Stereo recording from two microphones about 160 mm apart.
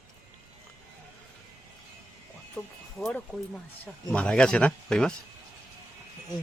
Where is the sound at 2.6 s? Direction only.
10° left (ahead or behind).